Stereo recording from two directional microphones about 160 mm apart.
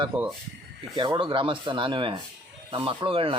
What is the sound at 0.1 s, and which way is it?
Speech, 35° right (ahead or behind).